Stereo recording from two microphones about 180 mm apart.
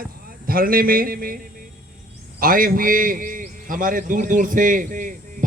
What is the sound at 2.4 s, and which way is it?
A man's voice, 50° right (ahead or behind).